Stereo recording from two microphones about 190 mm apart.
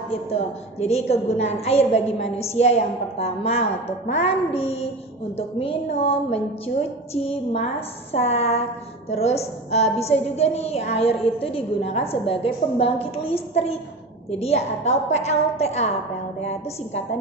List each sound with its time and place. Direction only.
0.1 s a woman's voice: 30° left (ahead or behind)
5.6 s a woman's voice: 30° left (ahead or behind)
8.1 s a woman's voice: 35° left (ahead or behind)